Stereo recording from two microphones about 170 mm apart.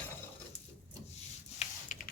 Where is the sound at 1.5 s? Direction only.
45° left (ahead or behind).